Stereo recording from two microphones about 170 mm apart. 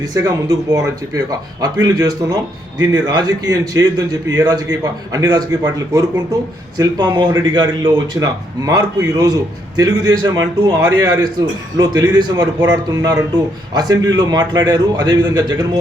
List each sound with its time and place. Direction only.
0.1 s speech: 20° right (ahead or behind)